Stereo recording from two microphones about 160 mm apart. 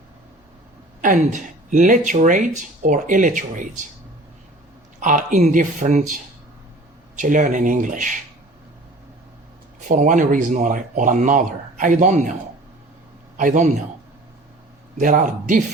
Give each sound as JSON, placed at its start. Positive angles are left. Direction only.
{"t": 1.0, "sound": "speech", "side_deg": -50}
{"t": 4.9, "sound": "speech", "side_deg": -55}
{"t": 7.2, "sound": "speech", "side_deg": -50}
{"t": 9.9, "sound": "speech", "side_deg": -55}
{"t": 13.3, "sound": "a man's voice", "side_deg": -50}
{"t": 14.9, "sound": "speech", "side_deg": -55}